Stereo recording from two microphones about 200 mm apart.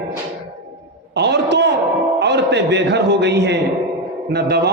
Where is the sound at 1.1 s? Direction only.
60° right (ahead or behind).